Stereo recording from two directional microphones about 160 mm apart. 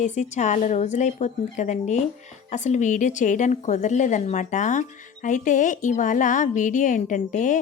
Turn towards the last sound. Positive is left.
turn(degrees=55)  # may be behind; listen again after turning